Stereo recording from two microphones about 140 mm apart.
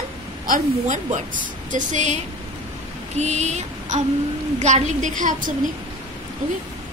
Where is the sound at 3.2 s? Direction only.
55° right (ahead or behind).